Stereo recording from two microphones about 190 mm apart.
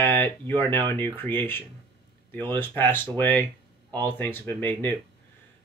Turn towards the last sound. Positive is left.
turn(degrees=10)  # may be behind; listen again after turning